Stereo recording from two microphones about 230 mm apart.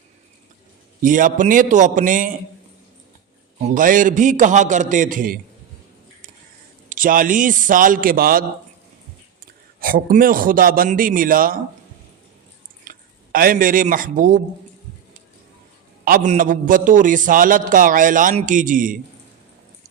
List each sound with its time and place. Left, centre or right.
1.0 s a man's voice: right
3.8 s a man's voice: right
6.9 s a man's voice: right
9.8 s a man's voice: right
12.8 s speech: right
16.0 s a man's voice: right